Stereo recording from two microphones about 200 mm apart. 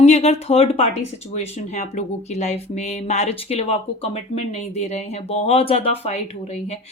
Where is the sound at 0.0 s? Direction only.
30° left (ahead or behind).